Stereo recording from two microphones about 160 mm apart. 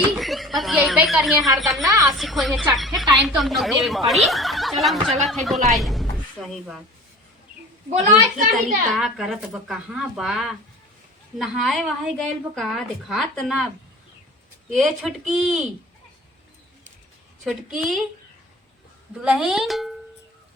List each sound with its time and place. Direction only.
0.2 s a woman's voice: centre (ahead or behind)
1.8 s a woman's voice: 20° right (ahead or behind)
2.1 s a woman's voice: centre (ahead or behind)
9.0 s speech: centre (ahead or behind)
14.7 s speech: centre (ahead or behind)
17.4 s speech: centre (ahead or behind)
19.2 s speech: 5° right (ahead or behind)